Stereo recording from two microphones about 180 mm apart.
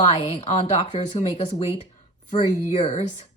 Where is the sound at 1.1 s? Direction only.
25° left (ahead or behind).